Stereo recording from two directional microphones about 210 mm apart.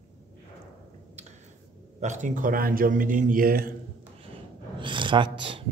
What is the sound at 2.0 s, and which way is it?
A man's voice, 35° right (ahead or behind).